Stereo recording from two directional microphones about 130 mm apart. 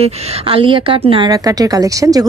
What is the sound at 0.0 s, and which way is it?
A woman's voice, 45° right (ahead or behind).